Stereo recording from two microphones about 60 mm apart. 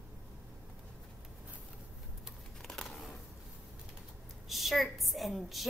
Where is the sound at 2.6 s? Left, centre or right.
Centre.